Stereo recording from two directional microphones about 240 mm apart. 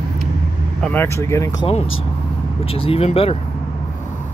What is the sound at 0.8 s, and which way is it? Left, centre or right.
Speech, centre.